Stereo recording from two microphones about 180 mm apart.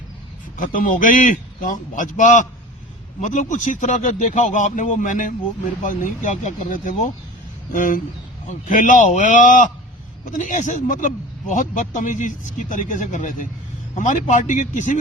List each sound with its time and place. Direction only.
0.5 s a man's voice: 50° left (ahead or behind)